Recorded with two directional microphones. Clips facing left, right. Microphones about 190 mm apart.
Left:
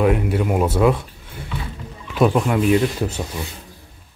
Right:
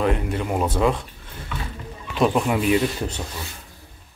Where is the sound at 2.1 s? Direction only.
Centre (ahead or behind).